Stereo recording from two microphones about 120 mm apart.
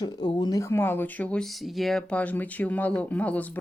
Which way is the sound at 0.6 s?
20° left (ahead or behind).